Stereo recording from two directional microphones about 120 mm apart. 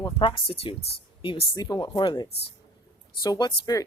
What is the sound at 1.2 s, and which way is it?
Speech, 45° left (ahead or behind).